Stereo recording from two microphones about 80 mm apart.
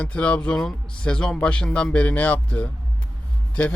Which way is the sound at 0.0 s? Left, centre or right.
Centre.